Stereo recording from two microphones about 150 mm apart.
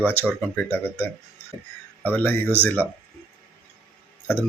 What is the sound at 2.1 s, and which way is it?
Speech, 10° left (ahead or behind).